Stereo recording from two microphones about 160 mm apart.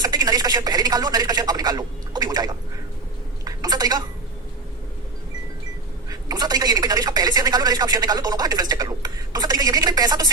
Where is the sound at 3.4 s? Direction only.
25° right (ahead or behind).